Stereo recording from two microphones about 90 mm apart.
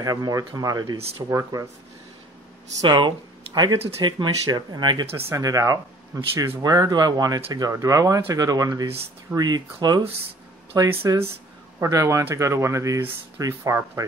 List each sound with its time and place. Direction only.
0.0 s speech: 40° right (ahead or behind)
2.7 s speech: 45° right (ahead or behind)
3.0 s speech: 55° right (ahead or behind)
5.1 s speech: 35° right (ahead or behind)
6.6 s speech: 45° right (ahead or behind)
10.7 s speech: 25° right (ahead or behind)